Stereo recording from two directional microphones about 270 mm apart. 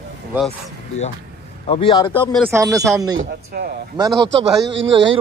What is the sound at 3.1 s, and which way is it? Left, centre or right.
A man's voice, right.